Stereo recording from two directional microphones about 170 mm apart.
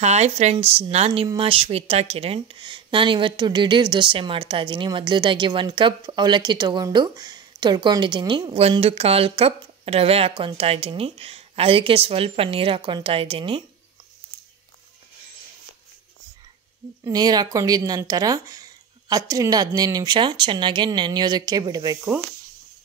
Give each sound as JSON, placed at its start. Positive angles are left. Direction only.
{"t": 0.0, "sound": "speech", "side_deg": -40}
{"t": 17.0, "sound": "speech", "side_deg": -20}